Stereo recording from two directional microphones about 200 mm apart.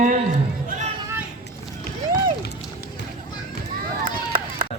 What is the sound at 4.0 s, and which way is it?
Chop, 45° right (ahead or behind).